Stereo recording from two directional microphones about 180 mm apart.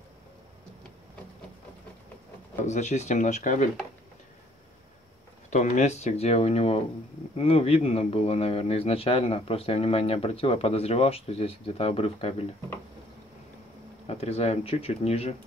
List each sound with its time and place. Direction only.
2.6 s a man's voice: 40° left (ahead or behind)
5.5 s a man's voice: 40° left (ahead or behind)
14.0 s a man's voice: 35° left (ahead or behind)